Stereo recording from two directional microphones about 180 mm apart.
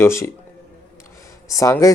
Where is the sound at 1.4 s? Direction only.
20° left (ahead or behind).